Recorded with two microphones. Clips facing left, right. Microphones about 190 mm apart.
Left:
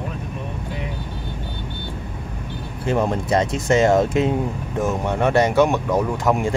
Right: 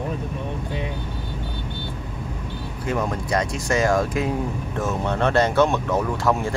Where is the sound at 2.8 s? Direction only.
30° left (ahead or behind).